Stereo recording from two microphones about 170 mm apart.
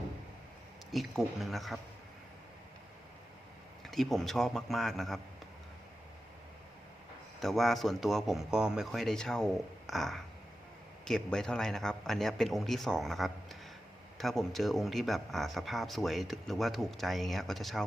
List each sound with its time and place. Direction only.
0.9 s speech: centre (ahead or behind)
3.8 s speech: centre (ahead or behind)
7.3 s speech: centre (ahead or behind)